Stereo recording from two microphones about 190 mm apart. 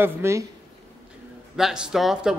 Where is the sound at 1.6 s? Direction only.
5° right (ahead or behind).